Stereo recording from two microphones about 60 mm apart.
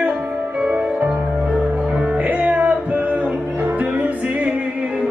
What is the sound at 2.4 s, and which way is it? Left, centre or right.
Music, right.